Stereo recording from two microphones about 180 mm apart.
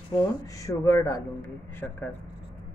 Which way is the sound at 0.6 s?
15° left (ahead or behind).